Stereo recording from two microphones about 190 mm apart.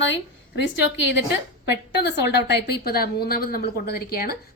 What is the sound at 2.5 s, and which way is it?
A woman's voice, 60° left (ahead or behind).